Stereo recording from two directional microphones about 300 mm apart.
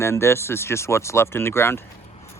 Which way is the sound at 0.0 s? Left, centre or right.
Centre.